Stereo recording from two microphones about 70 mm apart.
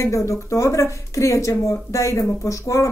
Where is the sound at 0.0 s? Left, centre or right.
Left.